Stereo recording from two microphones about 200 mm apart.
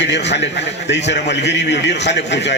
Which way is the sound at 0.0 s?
60° left (ahead or behind).